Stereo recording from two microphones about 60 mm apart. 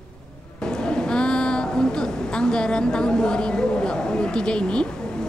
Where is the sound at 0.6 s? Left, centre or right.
Centre.